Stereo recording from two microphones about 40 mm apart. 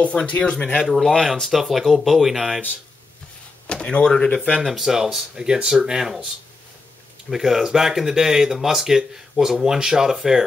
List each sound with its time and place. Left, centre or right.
0.3 s speech: left
0.8 s speech: centre
3.6 s speech: left
4.6 s speech: centre
7.2 s speech: centre